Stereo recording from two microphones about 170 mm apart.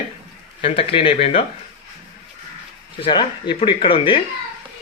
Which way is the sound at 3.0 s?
30° left (ahead or behind).